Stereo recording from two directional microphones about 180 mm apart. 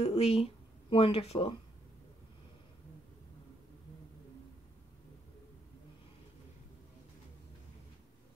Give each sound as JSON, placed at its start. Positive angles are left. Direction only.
{"t": 0.0, "sound": "speech", "side_deg": 35}